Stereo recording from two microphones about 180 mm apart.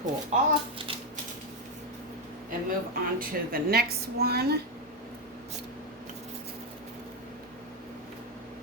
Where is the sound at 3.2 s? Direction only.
55° right (ahead or behind).